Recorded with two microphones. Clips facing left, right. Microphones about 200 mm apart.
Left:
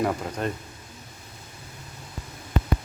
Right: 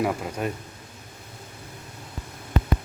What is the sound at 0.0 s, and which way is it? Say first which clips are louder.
Speech: even; 5° right (ahead or behind).